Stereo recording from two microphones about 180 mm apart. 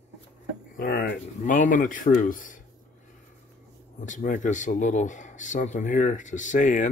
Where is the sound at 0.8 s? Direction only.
55° left (ahead or behind).